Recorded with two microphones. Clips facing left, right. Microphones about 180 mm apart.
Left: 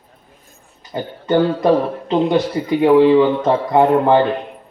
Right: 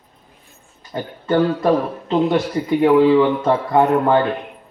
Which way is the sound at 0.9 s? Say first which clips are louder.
Left 2 dB; 20° left (ahead or behind).